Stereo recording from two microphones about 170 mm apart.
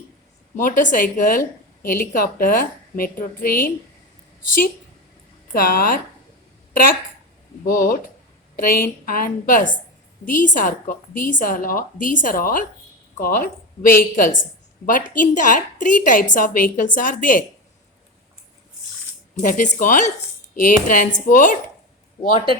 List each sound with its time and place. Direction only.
0.5 s a woman's voice: 50° left (ahead or behind)
5.5 s a woman's voice: 55° left (ahead or behind)
7.6 s a woman's voice: 55° left (ahead or behind)
19.4 s a woman's voice: 50° left (ahead or behind)